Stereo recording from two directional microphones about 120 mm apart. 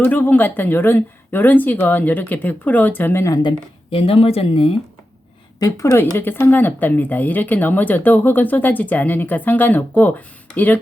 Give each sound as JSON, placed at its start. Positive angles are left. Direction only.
{"t": 0.0, "sound": "speech", "side_deg": 15}
{"t": 3.9, "sound": "speech", "side_deg": 50}
{"t": 5.5, "sound": "speech", "side_deg": 30}